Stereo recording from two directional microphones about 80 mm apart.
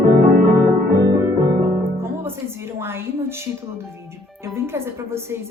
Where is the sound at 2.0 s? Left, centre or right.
Right.